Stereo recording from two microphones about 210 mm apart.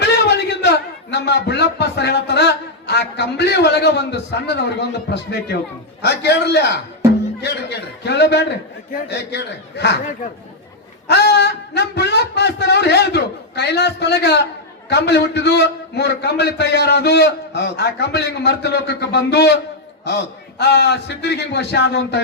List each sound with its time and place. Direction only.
0.0 s a sound: 50° left (ahead or behind)
5.0 s a man's voice: 55° left (ahead or behind)
11.1 s a man's voice: 50° left (ahead or behind)